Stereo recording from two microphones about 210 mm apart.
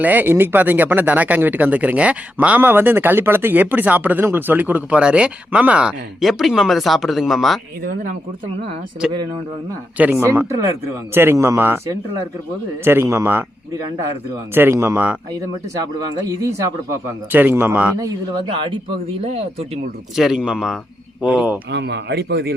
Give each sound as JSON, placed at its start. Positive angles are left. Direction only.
{"t": 0.0, "sound": "speech", "side_deg": -10}
{"t": 9.0, "sound": "speech", "side_deg": -5}
{"t": 14.5, "sound": "speech", "side_deg": -10}
{"t": 16.2, "sound": "speech", "side_deg": -15}
{"t": 18.3, "sound": "speech", "side_deg": -20}
{"t": 20.1, "sound": "speech", "side_deg": 0}
{"t": 21.7, "sound": "speech", "side_deg": -55}